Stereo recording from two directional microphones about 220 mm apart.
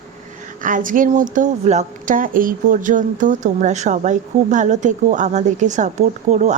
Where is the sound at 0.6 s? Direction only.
35° right (ahead or behind).